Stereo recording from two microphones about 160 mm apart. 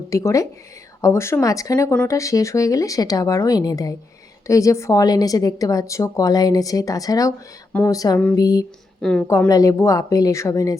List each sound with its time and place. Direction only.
0.1 s a woman's voice: 20° left (ahead or behind)
9.0 s a woman's voice: 5° left (ahead or behind)
9.5 s a woman's voice: 20° left (ahead or behind)